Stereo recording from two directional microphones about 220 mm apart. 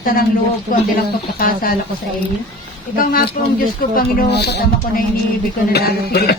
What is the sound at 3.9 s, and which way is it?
A woman's voice, 45° left (ahead or behind).